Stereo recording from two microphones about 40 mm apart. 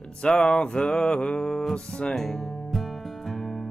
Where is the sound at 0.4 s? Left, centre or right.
Left.